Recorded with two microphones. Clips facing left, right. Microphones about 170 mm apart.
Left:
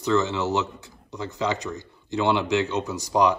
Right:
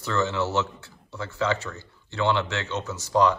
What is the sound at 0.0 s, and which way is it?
A man's voice, 15° left (ahead or behind).